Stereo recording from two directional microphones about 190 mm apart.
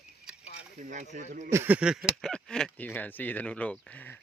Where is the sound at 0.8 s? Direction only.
45° right (ahead or behind).